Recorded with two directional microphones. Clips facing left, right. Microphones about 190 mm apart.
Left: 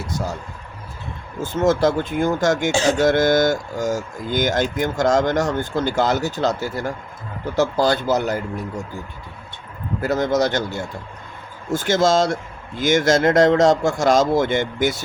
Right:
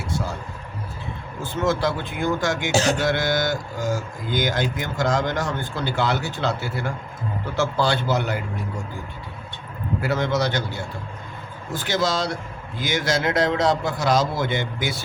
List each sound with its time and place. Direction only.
1.5 s speech: 45° left (ahead or behind)
10.0 s speech: 40° left (ahead or behind)